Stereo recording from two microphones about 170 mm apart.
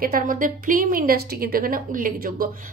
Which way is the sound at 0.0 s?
55° right (ahead or behind).